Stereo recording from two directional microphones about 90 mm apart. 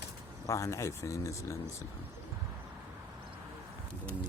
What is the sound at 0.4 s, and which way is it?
Speech, 35° left (ahead or behind).